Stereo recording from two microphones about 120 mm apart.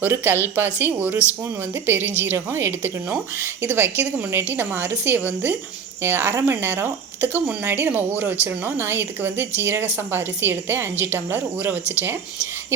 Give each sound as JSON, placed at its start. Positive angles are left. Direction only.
{"t": 0.0, "sound": "speech", "side_deg": -20}